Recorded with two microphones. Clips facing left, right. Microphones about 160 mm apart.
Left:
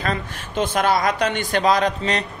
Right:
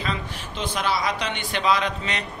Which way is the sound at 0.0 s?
50° left (ahead or behind).